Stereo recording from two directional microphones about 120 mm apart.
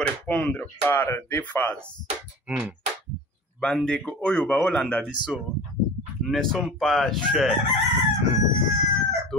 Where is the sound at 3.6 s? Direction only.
5° left (ahead or behind).